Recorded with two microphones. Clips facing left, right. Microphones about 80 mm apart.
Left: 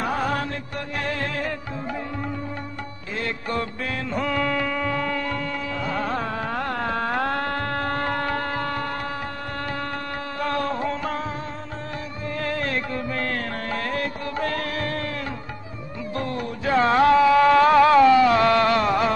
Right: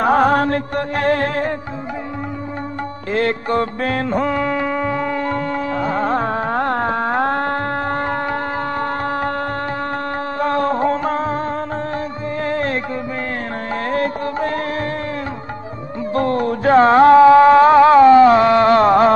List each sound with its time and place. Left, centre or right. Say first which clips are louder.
0.0 s music: right 11 dB; right
3.1 s music: right 11 dB; right
3.4 s music: right 8 dB; right
4.2 s music: right 5 dB; right
5.2 s music: right 7 dB; right
10.4 s music: right 8 dB; right
12.4 s music: right 7 dB; right
13.8 s music: right 10 dB; right
14.4 s music: right 4 dB; right
16.2 s music: right 11 dB; right